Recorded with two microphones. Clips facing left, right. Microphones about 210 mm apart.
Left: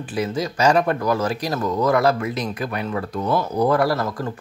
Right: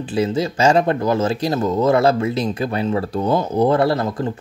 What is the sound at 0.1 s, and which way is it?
Speech, 25° right (ahead or behind).